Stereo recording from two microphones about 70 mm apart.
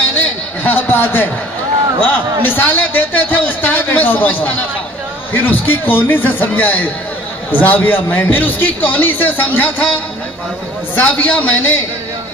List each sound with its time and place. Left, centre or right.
0.6 s a man's voice: left